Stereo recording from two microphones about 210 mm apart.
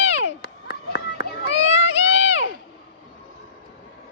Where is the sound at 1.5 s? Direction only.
30° left (ahead or behind).